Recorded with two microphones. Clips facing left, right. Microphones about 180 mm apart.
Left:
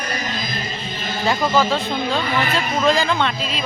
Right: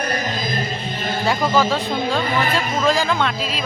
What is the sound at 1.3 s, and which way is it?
Speech, 10° right (ahead or behind).